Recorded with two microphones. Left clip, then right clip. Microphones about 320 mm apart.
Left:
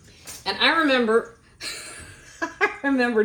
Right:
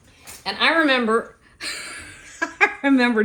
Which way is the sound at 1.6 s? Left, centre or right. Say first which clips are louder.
Right 4 dB; right.